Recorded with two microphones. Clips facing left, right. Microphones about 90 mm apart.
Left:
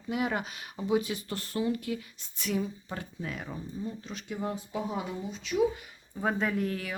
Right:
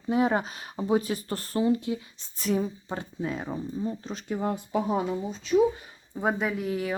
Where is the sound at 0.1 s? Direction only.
30° right (ahead or behind).